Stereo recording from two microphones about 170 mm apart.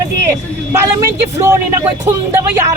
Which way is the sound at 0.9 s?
15° right (ahead or behind).